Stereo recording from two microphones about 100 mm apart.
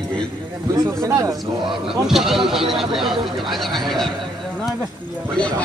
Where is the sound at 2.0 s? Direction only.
5° right (ahead or behind).